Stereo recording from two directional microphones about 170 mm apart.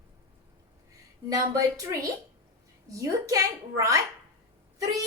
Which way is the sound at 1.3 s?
20° right (ahead or behind).